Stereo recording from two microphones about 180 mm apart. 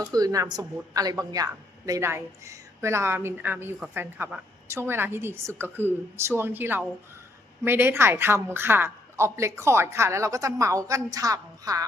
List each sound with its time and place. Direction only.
0.0 s a woman's voice: 20° right (ahead or behind)